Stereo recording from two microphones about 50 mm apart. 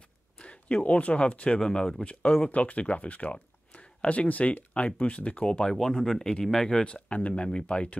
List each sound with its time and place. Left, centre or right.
0.4 s speech: left
1.6 s speech: centre